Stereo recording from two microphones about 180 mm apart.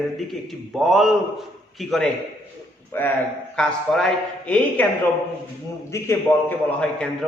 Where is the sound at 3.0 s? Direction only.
10° left (ahead or behind).